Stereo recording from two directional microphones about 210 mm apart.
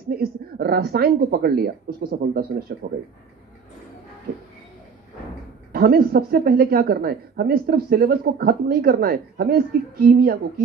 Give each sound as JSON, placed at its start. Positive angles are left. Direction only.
{"t": 0.1, "sound": "speech", "side_deg": -45}
{"t": 5.7, "sound": "speech", "side_deg": -45}